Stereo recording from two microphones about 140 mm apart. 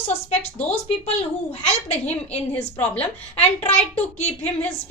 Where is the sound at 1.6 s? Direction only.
45° left (ahead or behind).